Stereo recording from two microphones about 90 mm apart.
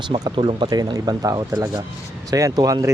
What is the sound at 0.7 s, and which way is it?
Speech, 45° right (ahead or behind).